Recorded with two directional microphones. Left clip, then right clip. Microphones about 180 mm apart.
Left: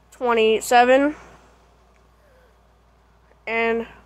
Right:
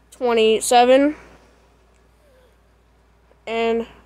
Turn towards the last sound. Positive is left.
turn(degrees=-20)  # may be behind; listen again after turning